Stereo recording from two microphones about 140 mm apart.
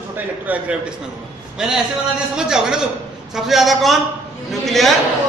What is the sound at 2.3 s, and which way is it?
A man's voice, 5° right (ahead or behind).